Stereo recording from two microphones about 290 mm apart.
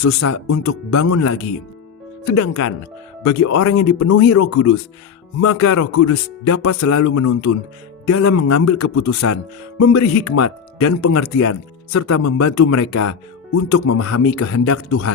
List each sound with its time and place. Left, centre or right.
0.0 s speech: left